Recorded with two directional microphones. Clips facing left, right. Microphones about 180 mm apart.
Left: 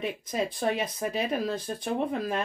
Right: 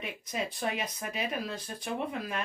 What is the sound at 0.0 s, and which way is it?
Speech, 30° left (ahead or behind).